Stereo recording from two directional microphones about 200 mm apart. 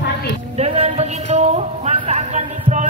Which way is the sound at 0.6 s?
30° right (ahead or behind).